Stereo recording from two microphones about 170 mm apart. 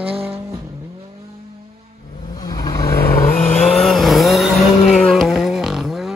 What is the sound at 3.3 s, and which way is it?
Vehicle, 45° left (ahead or behind).